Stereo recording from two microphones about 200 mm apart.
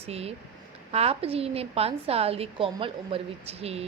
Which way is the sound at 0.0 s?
30° right (ahead or behind).